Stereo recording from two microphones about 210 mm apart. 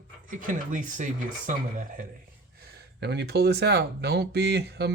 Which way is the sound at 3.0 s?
55° right (ahead or behind).